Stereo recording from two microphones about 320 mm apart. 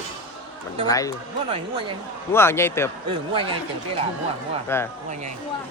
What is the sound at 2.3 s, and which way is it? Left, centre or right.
Speech, centre.